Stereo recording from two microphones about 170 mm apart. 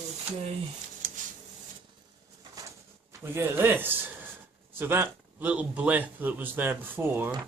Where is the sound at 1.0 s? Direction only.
50° right (ahead or behind).